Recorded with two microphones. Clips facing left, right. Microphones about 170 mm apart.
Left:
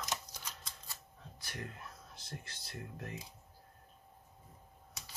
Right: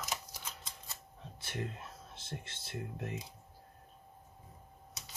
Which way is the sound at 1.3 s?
25° right (ahead or behind).